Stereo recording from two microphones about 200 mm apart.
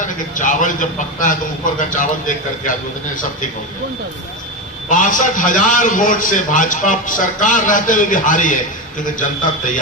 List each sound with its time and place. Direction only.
0.0 s a man's voice: 40° left (ahead or behind)
4.9 s a man's voice: 40° left (ahead or behind)